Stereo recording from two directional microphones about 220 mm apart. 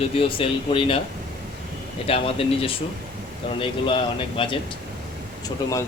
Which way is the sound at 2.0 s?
25° left (ahead or behind).